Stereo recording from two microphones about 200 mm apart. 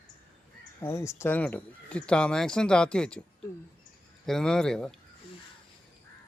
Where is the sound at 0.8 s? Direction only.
15° left (ahead or behind).